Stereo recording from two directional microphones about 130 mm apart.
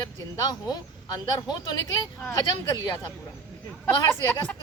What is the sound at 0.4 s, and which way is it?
Speech, 30° left (ahead or behind).